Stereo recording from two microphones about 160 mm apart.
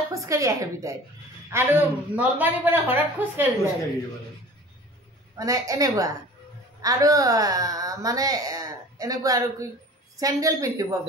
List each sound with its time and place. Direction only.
0.1 s a woman's voice: 20° right (ahead or behind)
5.4 s a woman's voice: 20° right (ahead or behind)